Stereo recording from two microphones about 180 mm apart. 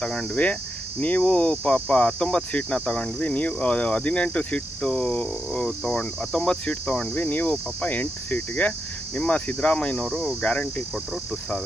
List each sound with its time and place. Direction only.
0.0 s speech: 5° left (ahead or behind)